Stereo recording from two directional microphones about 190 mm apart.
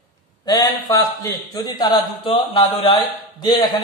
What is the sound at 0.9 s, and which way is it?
A man's voice, 15° left (ahead or behind).